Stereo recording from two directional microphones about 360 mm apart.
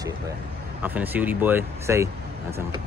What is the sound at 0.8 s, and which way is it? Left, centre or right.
Speech, centre.